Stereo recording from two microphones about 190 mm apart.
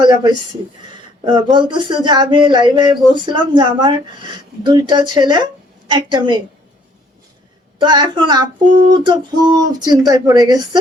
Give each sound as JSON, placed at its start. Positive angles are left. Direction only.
{"t": 0.0, "sound": "speech", "side_deg": -25}
{"t": 7.8, "sound": "speech", "side_deg": -25}